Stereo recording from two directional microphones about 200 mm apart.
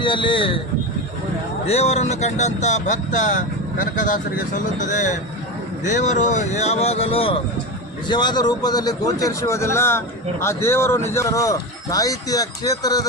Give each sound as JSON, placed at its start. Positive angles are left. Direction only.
{"t": 0.0, "sound": "speech", "side_deg": 25}
{"t": 1.6, "sound": "speech", "side_deg": 30}